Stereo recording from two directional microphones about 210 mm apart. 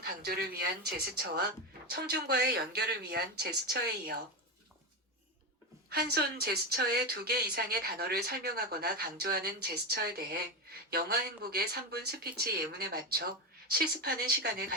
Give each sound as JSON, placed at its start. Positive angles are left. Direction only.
{"t": 0.0, "sound": "speech", "side_deg": -45}
{"t": 5.9, "sound": "speech", "side_deg": -50}